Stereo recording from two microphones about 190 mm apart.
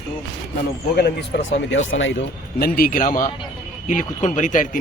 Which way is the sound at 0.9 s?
55° left (ahead or behind).